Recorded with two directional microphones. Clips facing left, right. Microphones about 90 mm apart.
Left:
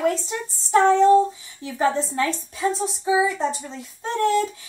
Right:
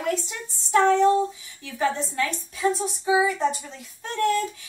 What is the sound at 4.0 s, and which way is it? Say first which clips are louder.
Speech: left 2 dB; 30° left (ahead or behind).